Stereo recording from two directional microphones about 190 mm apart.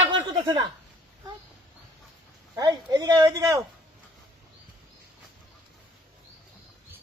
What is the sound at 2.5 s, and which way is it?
A man's voice, 20° right (ahead or behind).